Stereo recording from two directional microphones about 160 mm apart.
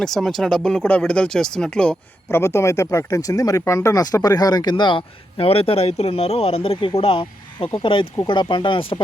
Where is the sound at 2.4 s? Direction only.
15° left (ahead or behind).